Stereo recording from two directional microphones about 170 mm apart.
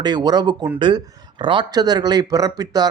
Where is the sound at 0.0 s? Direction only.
25° right (ahead or behind).